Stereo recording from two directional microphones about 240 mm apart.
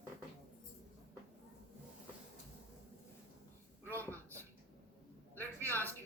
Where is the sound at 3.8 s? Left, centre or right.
Centre.